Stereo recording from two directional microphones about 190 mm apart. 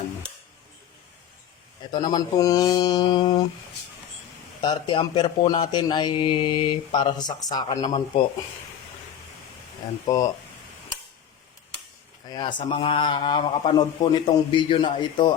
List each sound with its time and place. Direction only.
1.9 s speech: 20° left (ahead or behind)
4.6 s speech: 25° left (ahead or behind)
7.8 s speech: 30° left (ahead or behind)
12.3 s speech: 25° left (ahead or behind)